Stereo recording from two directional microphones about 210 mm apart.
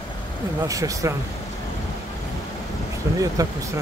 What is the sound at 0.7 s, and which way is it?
Speech, 15° right (ahead or behind).